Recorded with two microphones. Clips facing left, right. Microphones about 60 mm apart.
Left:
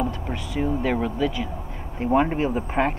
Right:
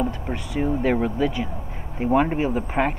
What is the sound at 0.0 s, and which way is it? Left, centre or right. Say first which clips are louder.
Speech: right 1 dB; centre.